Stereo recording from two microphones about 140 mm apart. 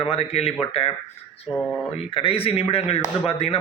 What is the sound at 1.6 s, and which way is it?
Speech, 5° left (ahead or behind).